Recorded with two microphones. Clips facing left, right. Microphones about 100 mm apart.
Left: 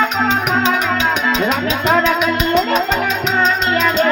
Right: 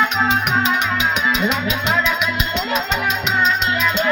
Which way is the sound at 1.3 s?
40° left (ahead or behind).